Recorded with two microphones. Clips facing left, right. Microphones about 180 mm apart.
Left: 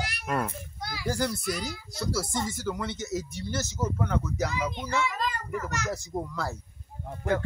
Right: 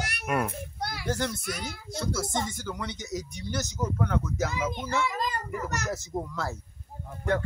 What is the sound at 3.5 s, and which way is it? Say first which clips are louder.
Speech: even; 15° right (ahead or behind).